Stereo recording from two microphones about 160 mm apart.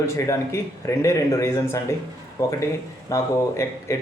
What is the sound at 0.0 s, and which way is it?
Speech, 20° left (ahead or behind).